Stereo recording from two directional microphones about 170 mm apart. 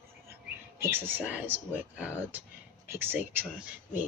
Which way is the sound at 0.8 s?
10° right (ahead or behind).